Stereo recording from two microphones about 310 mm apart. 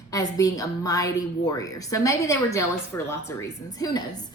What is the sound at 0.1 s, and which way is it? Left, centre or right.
A woman's voice, centre.